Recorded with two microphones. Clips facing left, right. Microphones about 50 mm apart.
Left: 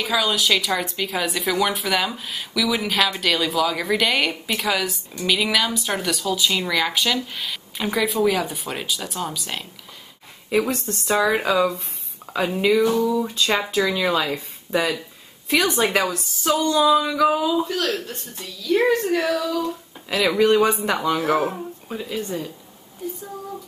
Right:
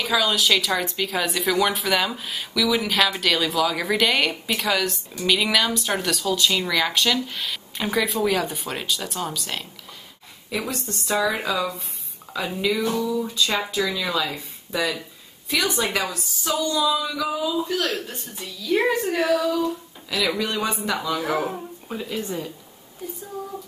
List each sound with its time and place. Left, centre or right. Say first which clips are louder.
0.0 s speech: even; centre
10.5 s a woman's voice: left 7 dB; left
17.6 s speech: left 1 dB; centre
20.1 s a woman's voice: left 7 dB; left
21.5 s speech: left 2 dB; centre